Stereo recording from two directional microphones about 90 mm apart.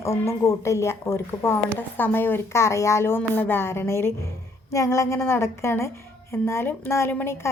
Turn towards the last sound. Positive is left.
turn(degrees=25)  # may be behind; listen again after turning